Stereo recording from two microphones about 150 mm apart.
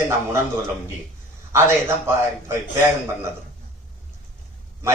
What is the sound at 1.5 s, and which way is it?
A man's voice, 20° right (ahead or behind).